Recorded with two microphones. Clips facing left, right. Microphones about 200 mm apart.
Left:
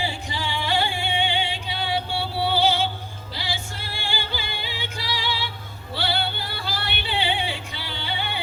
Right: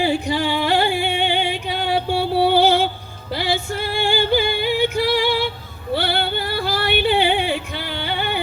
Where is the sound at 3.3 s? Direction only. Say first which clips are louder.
Right 11 dB; 55° right (ahead or behind).